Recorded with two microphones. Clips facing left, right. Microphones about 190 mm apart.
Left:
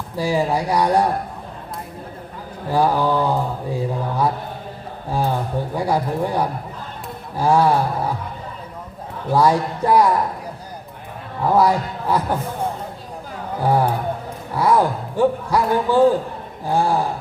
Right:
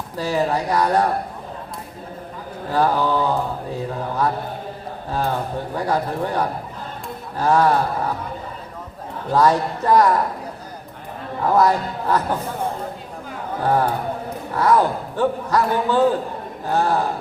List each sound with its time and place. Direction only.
0.2 s speech: 10° left (ahead or behind)
2.6 s speech: 10° left (ahead or behind)
5.7 s speech: 10° left (ahead or behind)
9.3 s speech: 10° left (ahead or behind)
11.4 s speech: 10° left (ahead or behind)
13.6 s speech: 10° left (ahead or behind)